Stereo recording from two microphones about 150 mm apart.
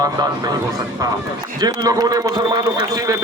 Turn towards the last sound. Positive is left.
turn(degrees=-25)  # may be behind; listen again after turning